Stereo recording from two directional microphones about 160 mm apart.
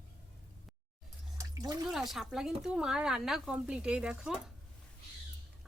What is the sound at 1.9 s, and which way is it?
Speech, centre (ahead or behind).